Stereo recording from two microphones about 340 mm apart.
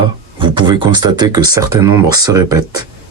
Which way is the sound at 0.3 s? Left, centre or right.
Centre.